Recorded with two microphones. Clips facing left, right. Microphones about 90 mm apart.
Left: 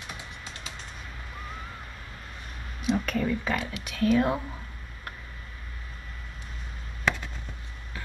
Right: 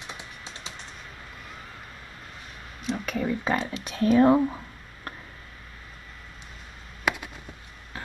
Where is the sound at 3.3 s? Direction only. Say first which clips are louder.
Right 2 dB; 25° right (ahead or behind).